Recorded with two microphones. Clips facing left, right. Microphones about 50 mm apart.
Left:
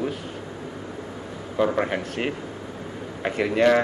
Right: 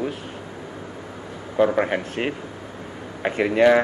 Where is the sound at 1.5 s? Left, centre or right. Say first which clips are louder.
Right 3 dB; centre.